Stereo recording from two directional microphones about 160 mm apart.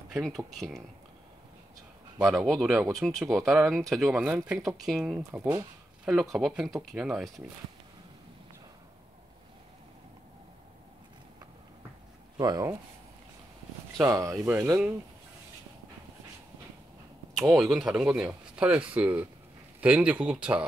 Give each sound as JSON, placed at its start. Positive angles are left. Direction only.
{"t": 0.1, "sound": "speech", "side_deg": 0}
{"t": 2.3, "sound": "speech", "side_deg": 0}
{"t": 12.4, "sound": "speech", "side_deg": -25}
{"t": 14.0, "sound": "speech", "side_deg": -20}
{"t": 17.3, "sound": "speech", "side_deg": 0}